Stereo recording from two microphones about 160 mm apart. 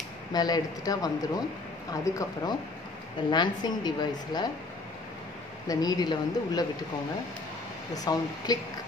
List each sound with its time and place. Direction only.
0.3 s a woman's voice: 25° left (ahead or behind)
5.7 s a woman's voice: 25° left (ahead or behind)
7.9 s a woman's voice: 25° left (ahead or behind)